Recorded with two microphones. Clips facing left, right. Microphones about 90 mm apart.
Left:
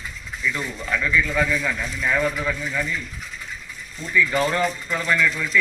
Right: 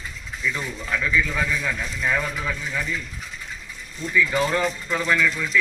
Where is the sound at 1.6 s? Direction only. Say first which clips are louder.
Left 1 dB; 5° right (ahead or behind).